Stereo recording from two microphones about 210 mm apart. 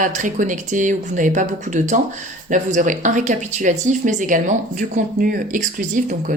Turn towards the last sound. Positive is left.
turn(degrees=-40)  # may be behind; listen again after turning